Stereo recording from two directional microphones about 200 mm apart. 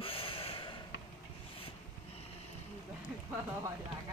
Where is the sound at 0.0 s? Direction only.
25° left (ahead or behind).